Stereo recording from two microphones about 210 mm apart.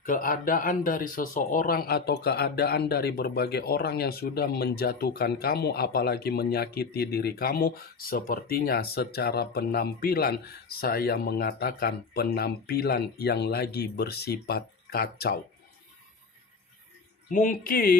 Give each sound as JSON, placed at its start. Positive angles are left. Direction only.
{"t": 0.0, "sound": "speech", "side_deg": 40}
{"t": 17.3, "sound": "speech", "side_deg": 40}